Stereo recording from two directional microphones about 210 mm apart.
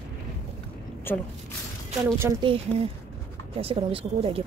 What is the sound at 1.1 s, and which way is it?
Speech, 10° left (ahead or behind).